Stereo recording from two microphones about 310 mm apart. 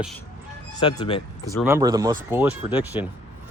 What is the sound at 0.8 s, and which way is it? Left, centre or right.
Speech, centre.